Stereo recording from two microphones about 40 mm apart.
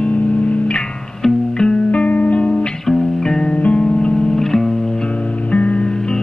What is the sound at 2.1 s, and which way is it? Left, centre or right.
Music, left.